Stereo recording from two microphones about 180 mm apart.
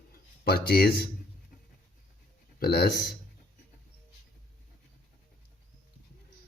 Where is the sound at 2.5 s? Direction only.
60° left (ahead or behind).